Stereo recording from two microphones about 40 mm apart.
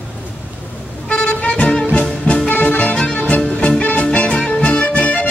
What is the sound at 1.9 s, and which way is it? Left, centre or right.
Music, left.